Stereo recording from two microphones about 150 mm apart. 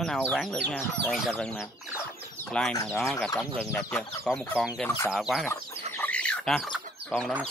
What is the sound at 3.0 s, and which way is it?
Speech, 20° left (ahead or behind).